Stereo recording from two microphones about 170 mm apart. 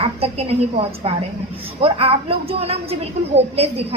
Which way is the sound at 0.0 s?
35° right (ahead or behind).